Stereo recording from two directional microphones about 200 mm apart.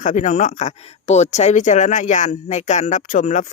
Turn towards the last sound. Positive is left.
turn(degrees=40)  # may be behind; listen again after turning